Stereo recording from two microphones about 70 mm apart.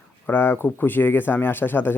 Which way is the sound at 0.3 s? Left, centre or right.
Left.